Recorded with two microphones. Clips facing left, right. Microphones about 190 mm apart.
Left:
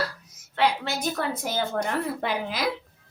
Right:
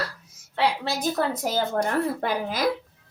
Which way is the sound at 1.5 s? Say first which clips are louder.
Right 3 dB; 45° right (ahead or behind).